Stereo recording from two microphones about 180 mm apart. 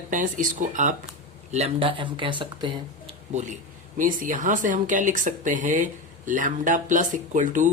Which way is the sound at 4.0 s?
45° right (ahead or behind).